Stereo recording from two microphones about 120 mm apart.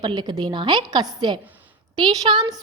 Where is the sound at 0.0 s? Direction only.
40° right (ahead or behind).